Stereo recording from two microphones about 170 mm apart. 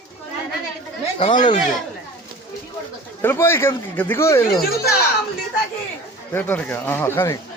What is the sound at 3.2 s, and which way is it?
Speech, 15° left (ahead or behind).